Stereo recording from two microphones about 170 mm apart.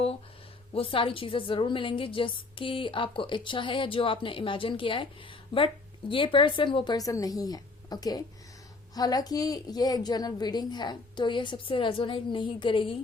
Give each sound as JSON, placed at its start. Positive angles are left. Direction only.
{"t": 0.7, "sound": "a woman's voice", "side_deg": 30}